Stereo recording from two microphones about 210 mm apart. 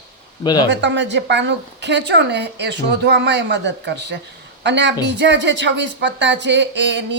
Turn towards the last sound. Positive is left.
turn(degrees=-55)  # may be behind; listen again after turning